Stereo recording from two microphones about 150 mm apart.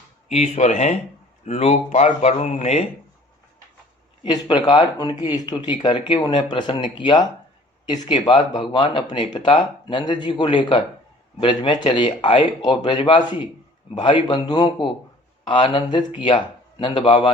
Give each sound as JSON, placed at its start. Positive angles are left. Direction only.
{"t": 0.3, "sound": "speech", "side_deg": 50}
{"t": 4.2, "sound": "speech", "side_deg": 30}